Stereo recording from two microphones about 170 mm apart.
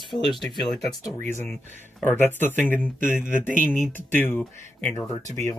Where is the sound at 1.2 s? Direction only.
15° left (ahead or behind).